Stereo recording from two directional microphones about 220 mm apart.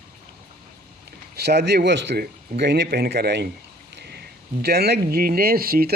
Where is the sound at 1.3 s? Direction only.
50° right (ahead or behind).